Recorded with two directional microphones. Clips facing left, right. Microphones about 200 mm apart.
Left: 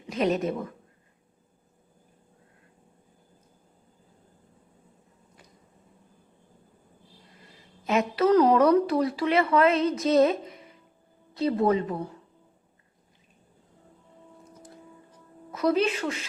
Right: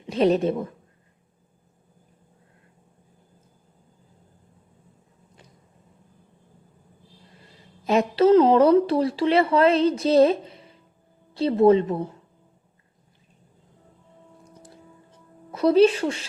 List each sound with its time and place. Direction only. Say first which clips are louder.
0.1 s a woman's voice: right 5 dB; 30° right (ahead or behind)
7.9 s speech: right 5 dB; 30° right (ahead or behind)
15.5 s a woman's voice: right 7 dB; 30° right (ahead or behind)